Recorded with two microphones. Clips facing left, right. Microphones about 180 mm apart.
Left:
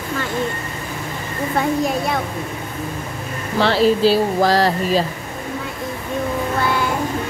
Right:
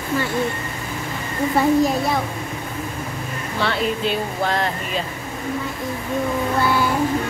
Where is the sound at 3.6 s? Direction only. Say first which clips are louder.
Left 8 dB; 30° left (ahead or behind).